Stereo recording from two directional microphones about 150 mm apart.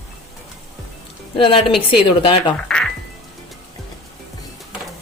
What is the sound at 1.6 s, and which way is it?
Speech, centre (ahead or behind).